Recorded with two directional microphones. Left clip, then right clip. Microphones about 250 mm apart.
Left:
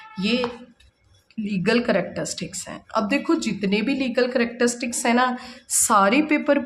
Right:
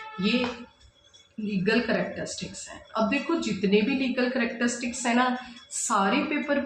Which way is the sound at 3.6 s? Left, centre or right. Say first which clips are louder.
Left 1 dB; left.